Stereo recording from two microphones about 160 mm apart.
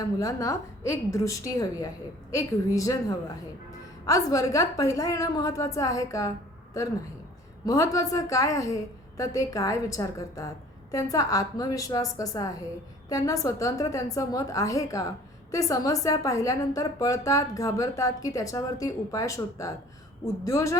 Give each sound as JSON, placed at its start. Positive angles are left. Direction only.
{"t": 0.0, "sound": "a woman's voice", "side_deg": 20}